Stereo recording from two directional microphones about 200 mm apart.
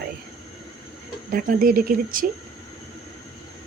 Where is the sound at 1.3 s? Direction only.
45° right (ahead or behind).